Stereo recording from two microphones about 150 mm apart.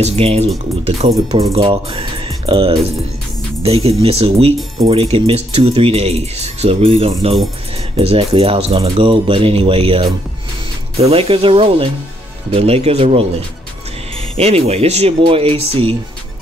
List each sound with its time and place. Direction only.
0.0 s speech: 45° right (ahead or behind)
14.3 s speech: 40° right (ahead or behind)